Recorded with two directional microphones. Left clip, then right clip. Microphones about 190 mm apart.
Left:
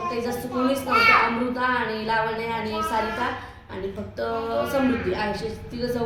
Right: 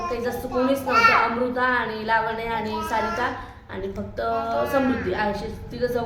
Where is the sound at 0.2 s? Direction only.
25° right (ahead or behind).